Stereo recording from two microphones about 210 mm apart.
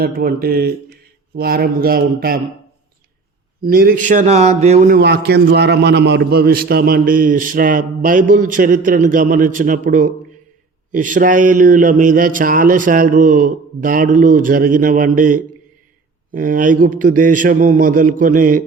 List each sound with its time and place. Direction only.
0.0 s a man's voice: 45° right (ahead or behind)
3.6 s a man's voice: 45° right (ahead or behind)
4.9 s a man's voice: 50° right (ahead or behind)
10.9 s a man's voice: 40° right (ahead or behind)